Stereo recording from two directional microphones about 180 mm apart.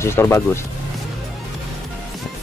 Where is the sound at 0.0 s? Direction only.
15° left (ahead or behind).